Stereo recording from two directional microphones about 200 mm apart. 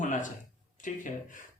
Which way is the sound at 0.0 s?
40° left (ahead or behind).